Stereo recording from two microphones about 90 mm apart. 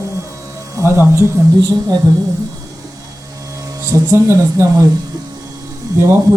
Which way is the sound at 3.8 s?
35° right (ahead or behind).